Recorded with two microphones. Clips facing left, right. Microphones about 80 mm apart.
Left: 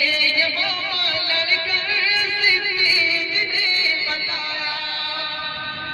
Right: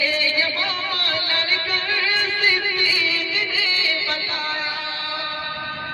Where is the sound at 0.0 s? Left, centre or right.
Right.